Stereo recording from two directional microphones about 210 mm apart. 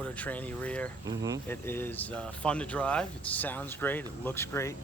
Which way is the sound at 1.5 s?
10° left (ahead or behind).